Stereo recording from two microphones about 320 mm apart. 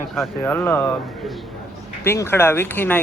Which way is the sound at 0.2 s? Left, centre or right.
Centre.